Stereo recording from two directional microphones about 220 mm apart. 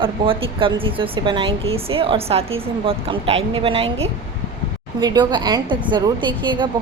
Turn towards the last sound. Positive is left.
turn(degrees=-20)  # may be behind; listen again after turning